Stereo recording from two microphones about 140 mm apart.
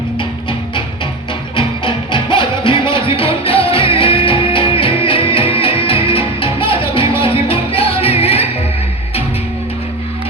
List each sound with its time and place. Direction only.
1.5 s music: 35° left (ahead or behind)